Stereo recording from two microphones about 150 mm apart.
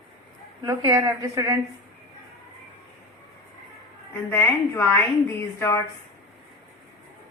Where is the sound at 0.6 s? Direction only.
25° right (ahead or behind).